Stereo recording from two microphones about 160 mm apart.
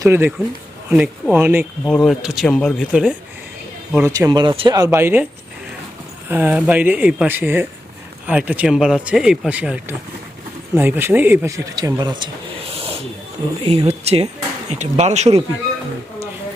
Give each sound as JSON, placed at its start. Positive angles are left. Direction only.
{"t": 0.0, "sound": "speech", "side_deg": -15}
{"t": 1.8, "sound": "speech", "side_deg": 0}
{"t": 4.1, "sound": "speech", "side_deg": -25}
{"t": 4.8, "sound": "speech", "side_deg": -15}